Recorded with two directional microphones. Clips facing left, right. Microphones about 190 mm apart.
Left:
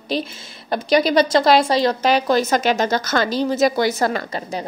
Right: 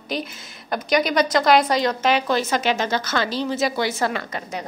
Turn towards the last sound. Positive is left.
turn(degrees=30)  # may be behind; listen again after turning